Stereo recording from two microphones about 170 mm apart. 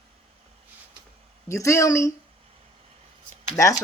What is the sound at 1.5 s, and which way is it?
Speech, 20° left (ahead or behind).